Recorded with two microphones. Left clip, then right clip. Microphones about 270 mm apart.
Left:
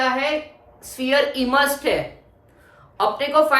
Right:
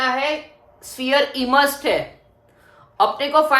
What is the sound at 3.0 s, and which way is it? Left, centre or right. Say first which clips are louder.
Speech: right 1 dB; right.